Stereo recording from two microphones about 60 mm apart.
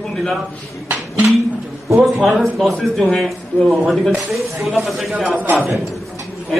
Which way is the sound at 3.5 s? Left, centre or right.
Left.